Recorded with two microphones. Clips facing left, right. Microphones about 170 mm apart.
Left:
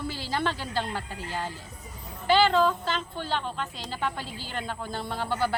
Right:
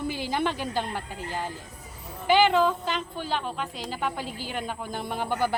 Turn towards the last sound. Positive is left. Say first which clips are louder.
# right 1 dB
turn(degrees=-15)  # may be behind; listen again after turning